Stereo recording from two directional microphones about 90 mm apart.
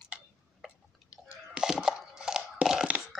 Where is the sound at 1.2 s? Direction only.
10° right (ahead or behind).